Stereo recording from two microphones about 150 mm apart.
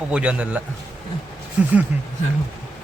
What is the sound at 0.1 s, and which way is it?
Speech, 10° right (ahead or behind).